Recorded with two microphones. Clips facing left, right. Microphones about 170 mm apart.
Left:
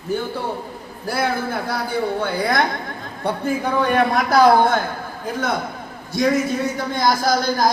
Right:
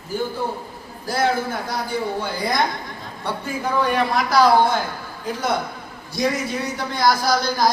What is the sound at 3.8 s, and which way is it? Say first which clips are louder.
Speech: left 3 dB; 50° left (ahead or behind).